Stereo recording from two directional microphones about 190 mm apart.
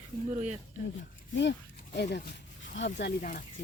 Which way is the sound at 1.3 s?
65° left (ahead or behind).